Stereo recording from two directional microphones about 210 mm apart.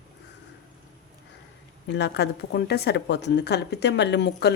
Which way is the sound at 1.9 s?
55° left (ahead or behind).